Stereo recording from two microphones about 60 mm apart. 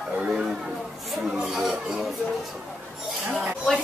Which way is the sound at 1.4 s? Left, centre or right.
Centre.